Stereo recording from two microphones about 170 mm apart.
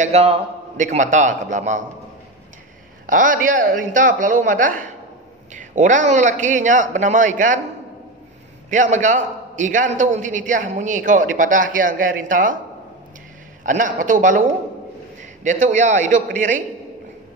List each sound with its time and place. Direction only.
0.0 s a man's voice: 40° right (ahead or behind)
3.1 s a man's voice: 50° right (ahead or behind)
8.6 s a man's voice: 50° right (ahead or behind)
13.7 s a man's voice: 50° right (ahead or behind)
15.4 s a man's voice: 45° right (ahead or behind)